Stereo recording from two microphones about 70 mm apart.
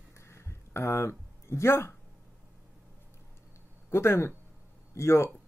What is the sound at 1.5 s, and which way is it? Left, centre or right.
Speech, left.